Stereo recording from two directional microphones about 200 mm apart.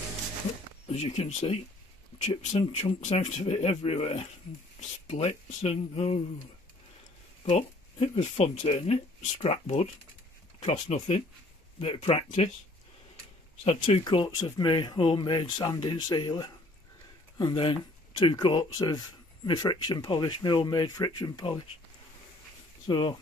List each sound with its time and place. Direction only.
0.8 s speech: 30° left (ahead or behind)
7.4 s speech: 30° left (ahead or behind)
13.7 s speech: 25° left (ahead or behind)
22.8 s speech: 20° left (ahead or behind)